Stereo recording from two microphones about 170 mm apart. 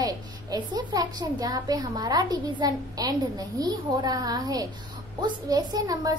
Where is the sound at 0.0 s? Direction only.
25° right (ahead or behind).